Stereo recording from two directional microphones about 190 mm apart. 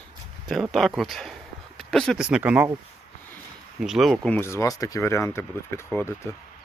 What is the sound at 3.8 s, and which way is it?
Speech, centre (ahead or behind).